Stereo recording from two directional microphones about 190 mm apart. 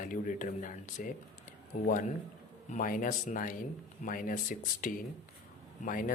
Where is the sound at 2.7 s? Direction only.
45° left (ahead or behind).